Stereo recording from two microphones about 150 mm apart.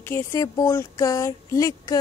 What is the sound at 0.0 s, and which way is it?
Speech, 15° left (ahead or behind).